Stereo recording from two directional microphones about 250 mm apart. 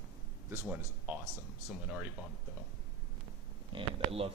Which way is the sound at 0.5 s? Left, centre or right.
Centre.